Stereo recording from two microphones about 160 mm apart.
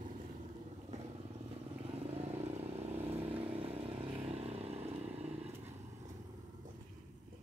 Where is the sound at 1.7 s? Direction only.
35° right (ahead or behind).